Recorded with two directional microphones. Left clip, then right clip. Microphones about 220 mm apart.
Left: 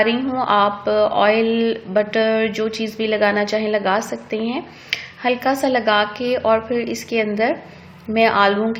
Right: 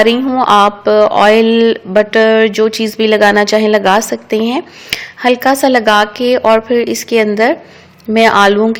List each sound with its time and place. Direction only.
0.0 s a woman's voice: 50° right (ahead or behind)